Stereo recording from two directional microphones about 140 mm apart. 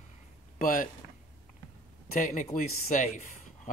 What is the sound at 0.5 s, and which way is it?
Speech, 80° left.